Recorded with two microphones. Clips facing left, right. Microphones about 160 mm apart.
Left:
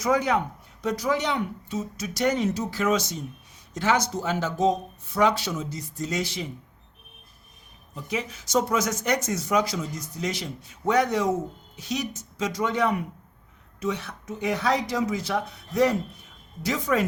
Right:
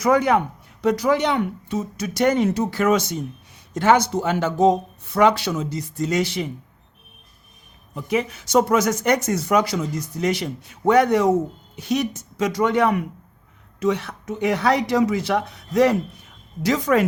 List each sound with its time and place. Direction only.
0.0 s speech: 65° right (ahead or behind)
7.9 s speech: 60° right (ahead or behind)